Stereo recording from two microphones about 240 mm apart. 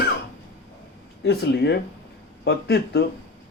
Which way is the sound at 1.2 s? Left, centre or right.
Left.